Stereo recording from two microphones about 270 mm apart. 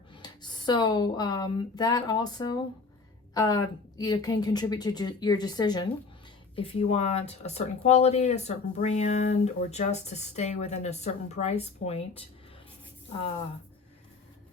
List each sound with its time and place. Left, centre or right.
0.1 s a woman's voice: centre